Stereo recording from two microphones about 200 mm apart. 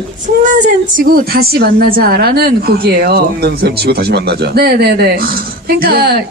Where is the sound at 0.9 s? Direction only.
45° right (ahead or behind).